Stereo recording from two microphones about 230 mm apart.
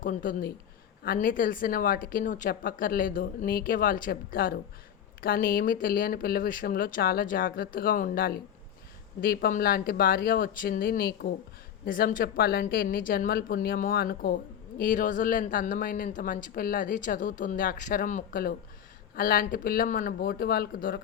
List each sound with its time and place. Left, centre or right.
0.0 s a man's voice: left